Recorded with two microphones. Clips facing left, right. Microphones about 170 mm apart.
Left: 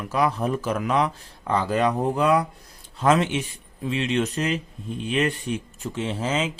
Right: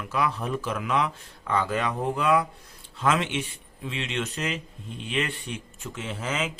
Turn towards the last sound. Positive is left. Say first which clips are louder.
# left 5 dB
turn(degrees=30)  # may be behind; listen again after turning